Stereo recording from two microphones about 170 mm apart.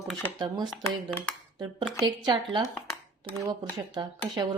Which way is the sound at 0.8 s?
15° left (ahead or behind).